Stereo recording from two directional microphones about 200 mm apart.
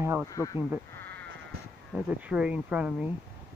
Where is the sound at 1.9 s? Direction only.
5° right (ahead or behind).